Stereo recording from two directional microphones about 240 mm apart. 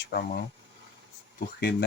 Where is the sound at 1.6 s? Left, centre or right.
Left.